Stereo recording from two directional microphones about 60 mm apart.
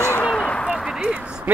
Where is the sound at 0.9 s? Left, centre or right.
Centre.